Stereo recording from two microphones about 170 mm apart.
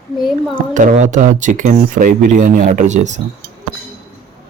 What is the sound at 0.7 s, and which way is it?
Speech, 50° right (ahead or behind).